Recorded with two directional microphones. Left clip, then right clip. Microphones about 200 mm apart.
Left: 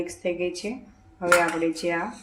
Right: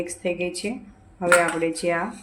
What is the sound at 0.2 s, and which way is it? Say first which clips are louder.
Speech: right 1 dB; 15° right (ahead or behind).